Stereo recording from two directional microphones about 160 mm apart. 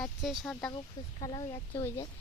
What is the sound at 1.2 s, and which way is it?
Speech, 35° left (ahead or behind).